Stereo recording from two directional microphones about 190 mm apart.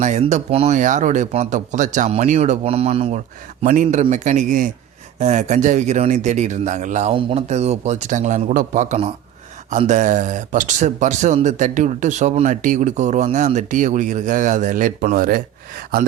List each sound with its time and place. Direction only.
0.0 s speech: 40° right (ahead or behind)